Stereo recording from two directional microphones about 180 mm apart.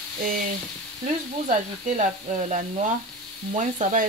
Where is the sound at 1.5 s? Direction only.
45° right (ahead or behind).